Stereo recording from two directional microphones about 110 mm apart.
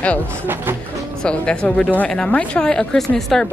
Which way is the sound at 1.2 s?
10° left (ahead or behind).